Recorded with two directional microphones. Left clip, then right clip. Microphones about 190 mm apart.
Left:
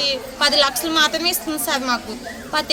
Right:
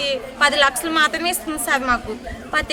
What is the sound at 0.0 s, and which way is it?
A woman's voice, centre (ahead or behind).